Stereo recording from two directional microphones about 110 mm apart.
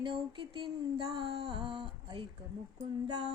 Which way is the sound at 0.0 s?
50° right (ahead or behind).